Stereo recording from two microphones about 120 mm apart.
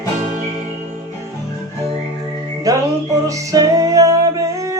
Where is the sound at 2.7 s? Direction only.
30° right (ahead or behind).